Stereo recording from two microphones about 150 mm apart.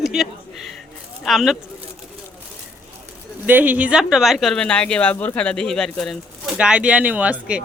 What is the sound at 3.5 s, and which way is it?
Speech, 10° right (ahead or behind).